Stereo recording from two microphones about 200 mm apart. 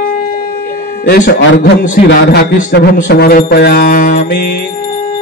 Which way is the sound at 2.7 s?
50° left (ahead or behind).